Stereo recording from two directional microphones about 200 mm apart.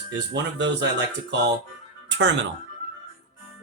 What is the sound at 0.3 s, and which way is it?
Speech, 60° right (ahead or behind).